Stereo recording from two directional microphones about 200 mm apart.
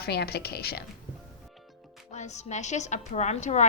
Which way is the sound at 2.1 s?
35° left (ahead or behind).